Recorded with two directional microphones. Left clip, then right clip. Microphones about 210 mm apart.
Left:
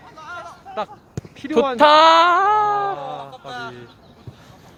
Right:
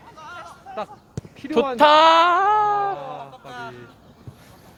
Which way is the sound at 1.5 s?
Centre (ahead or behind).